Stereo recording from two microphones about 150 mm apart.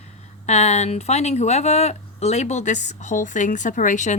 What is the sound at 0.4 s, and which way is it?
Speech, 50° left (ahead or behind).